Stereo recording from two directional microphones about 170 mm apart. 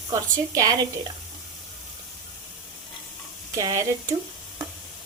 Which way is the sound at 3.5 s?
20° right (ahead or behind).